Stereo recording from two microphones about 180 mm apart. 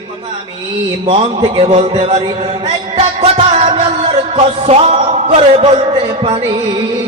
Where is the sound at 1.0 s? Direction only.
30° right (ahead or behind).